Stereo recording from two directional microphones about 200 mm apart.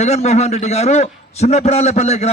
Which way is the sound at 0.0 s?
35° left (ahead or behind).